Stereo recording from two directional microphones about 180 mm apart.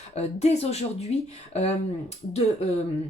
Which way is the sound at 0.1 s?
35° left (ahead or behind).